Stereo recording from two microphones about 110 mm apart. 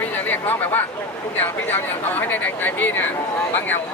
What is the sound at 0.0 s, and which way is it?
Chatter, 15° left (ahead or behind).